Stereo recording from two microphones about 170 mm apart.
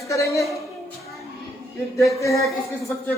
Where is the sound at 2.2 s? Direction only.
20° left (ahead or behind).